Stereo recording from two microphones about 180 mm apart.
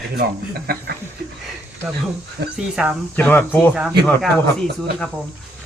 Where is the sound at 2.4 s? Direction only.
75° right (ahead or behind).